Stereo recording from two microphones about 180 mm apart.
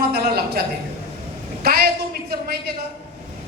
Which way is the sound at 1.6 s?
60° right (ahead or behind).